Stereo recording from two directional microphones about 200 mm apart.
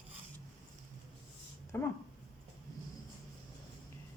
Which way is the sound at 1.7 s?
10° left (ahead or behind).